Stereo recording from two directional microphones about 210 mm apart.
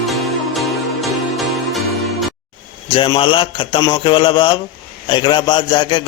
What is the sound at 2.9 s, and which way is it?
A man's voice, 25° left (ahead or behind).